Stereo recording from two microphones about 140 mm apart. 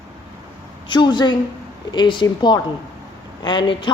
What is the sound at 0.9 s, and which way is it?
Speech, 35° left (ahead or behind).